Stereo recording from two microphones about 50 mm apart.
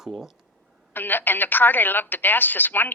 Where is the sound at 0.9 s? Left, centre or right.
Left.